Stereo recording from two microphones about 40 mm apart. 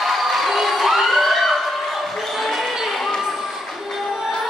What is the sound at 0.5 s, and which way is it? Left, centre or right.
Emergency vehicle, centre.